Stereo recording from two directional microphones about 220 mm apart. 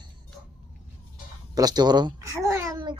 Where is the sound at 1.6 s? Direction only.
20° right (ahead or behind).